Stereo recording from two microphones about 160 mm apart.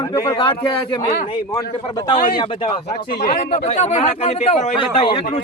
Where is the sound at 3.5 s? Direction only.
40° left (ahead or behind).